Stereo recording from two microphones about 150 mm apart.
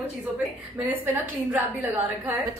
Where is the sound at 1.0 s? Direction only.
15° right (ahead or behind).